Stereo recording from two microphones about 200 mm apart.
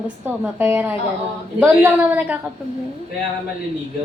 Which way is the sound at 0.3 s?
10° right (ahead or behind).